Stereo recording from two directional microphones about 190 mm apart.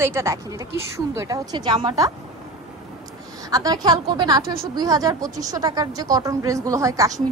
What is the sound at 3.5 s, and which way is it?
A woman's voice, 20° right (ahead or behind).